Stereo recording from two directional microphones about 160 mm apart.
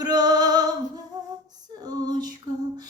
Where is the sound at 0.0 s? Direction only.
25° right (ahead or behind).